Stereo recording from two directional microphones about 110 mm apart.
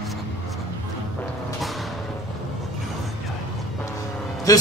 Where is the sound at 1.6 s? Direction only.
Centre (ahead or behind).